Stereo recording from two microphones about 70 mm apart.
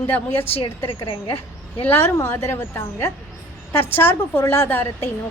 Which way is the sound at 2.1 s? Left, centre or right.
Left.